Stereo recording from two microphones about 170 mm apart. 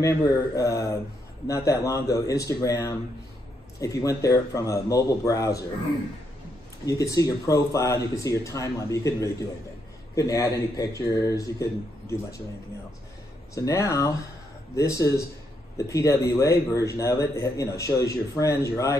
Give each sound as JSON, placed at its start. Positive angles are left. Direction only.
{"t": 0.0, "sound": "a man's voice", "side_deg": 20}
{"t": 6.9, "sound": "a man's voice", "side_deg": 20}
{"t": 13.6, "sound": "a man's voice", "side_deg": 20}